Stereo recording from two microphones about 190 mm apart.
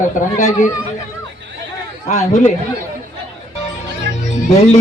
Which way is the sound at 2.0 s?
35° left (ahead or behind).